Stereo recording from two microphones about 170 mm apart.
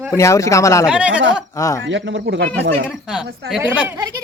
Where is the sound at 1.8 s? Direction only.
90° right.